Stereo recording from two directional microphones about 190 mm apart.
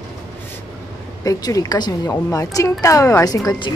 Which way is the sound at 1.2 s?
20° left (ahead or behind).